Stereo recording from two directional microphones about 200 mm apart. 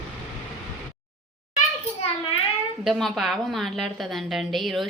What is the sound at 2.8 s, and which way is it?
A woman's voice, centre (ahead or behind).